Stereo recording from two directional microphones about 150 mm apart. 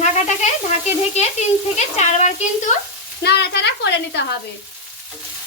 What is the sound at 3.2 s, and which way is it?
Speech, 90° left.